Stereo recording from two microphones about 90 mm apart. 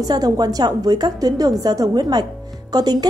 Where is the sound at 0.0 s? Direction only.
45° right (ahead or behind).